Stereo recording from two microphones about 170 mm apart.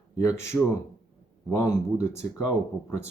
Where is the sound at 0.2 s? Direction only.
15° left (ahead or behind).